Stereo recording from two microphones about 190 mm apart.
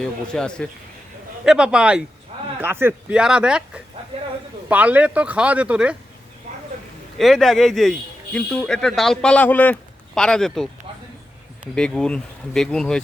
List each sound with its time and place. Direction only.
0.0 s speech: 5° left (ahead or behind)
4.1 s a sound: 30° right (ahead or behind)
4.7 s speech: 10° right (ahead or behind)
7.2 s speech: centre (ahead or behind)
11.7 s speech: 5° left (ahead or behind)